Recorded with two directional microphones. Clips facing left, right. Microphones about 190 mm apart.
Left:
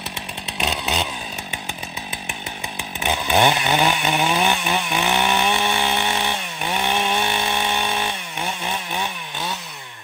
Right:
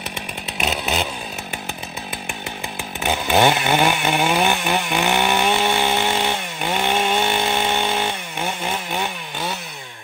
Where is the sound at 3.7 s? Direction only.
15° right (ahead or behind).